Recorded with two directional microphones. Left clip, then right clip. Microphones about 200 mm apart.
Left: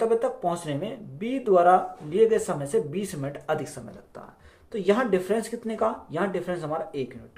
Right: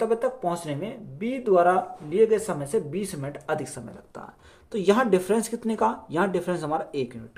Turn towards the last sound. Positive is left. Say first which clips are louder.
# right 2 dB
turn(degrees=-50)  # may be behind; listen again after turning